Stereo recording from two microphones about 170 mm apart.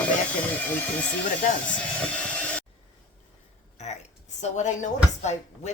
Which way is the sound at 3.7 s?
40° left (ahead or behind).